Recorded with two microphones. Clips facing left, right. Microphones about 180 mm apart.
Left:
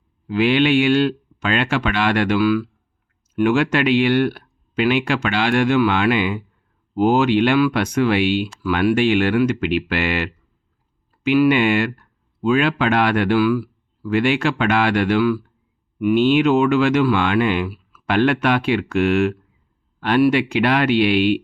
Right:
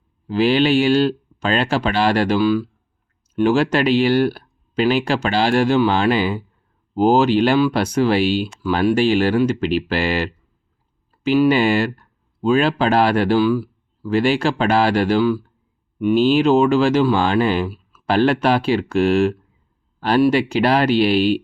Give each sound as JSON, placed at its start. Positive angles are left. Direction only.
{"t": 0.3, "sound": "speech", "side_deg": -35}